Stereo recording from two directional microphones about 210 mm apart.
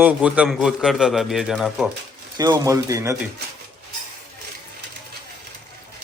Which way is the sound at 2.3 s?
15° right (ahead or behind).